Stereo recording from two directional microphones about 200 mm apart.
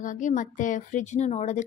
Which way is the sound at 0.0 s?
40° left (ahead or behind).